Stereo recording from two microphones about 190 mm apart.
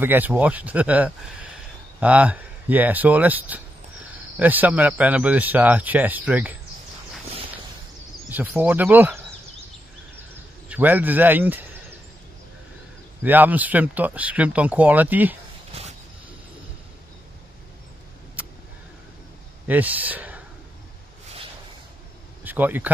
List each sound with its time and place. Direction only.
0.0 s speech: 10° right (ahead or behind)
8.3 s speech: 10° right (ahead or behind)
10.7 s a man's voice: 10° right (ahead or behind)
13.2 s speech: 10° right (ahead or behind)
15.7 s a sound: 30° right (ahead or behind)
18.4 s a sound: 10° right (ahead or behind)
19.7 s speech: 10° right (ahead or behind)
22.4 s speech: 10° right (ahead or behind)